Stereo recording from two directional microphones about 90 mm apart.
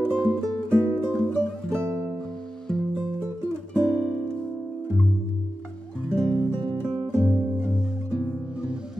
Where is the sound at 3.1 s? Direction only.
25° right (ahead or behind).